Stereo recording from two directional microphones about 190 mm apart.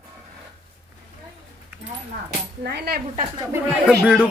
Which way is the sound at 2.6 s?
60° right (ahead or behind).